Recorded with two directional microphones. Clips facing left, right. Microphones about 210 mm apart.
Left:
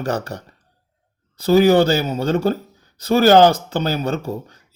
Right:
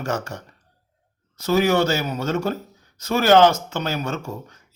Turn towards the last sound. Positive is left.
turn(degrees=35)  # may be behind; listen again after turning